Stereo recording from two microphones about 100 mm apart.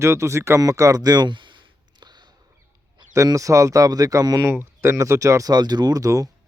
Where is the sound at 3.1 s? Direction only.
35° right (ahead or behind).